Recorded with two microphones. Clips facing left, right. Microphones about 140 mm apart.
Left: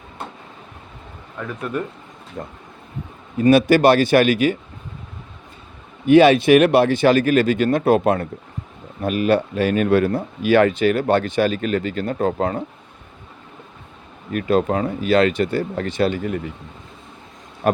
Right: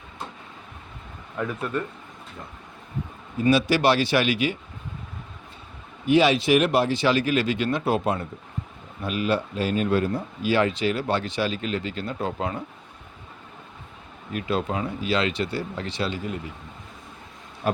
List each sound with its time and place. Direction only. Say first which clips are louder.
0.2 s vehicle: left 4 dB; 60° left (ahead or behind)
1.4 s speech: even; 5° right (ahead or behind)
3.4 s speech: left 7 dB; 50° left (ahead or behind)
6.1 s speech: left 7 dB; 55° left (ahead or behind)
14.3 s speech: left 8 dB; 50° left (ahead or behind)